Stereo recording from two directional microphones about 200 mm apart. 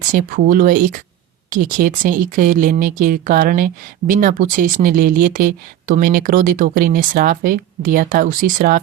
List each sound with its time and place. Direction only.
0.1 s speech: 45° right (ahead or behind)